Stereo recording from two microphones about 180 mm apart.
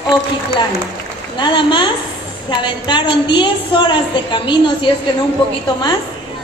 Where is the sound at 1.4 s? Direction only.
25° left (ahead or behind).